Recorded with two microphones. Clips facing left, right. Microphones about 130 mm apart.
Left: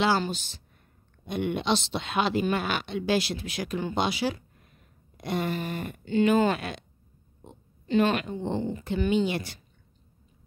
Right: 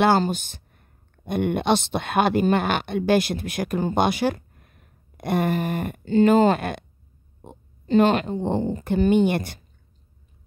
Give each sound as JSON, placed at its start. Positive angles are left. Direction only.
{"t": 0.0, "sound": "speech", "side_deg": -55}